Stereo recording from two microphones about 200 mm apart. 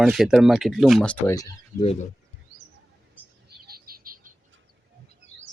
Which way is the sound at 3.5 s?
50° right (ahead or behind).